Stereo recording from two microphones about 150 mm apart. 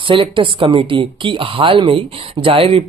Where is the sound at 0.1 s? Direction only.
35° right (ahead or behind).